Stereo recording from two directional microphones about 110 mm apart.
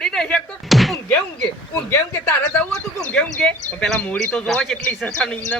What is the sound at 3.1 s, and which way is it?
A man's voice, 10° left (ahead or behind).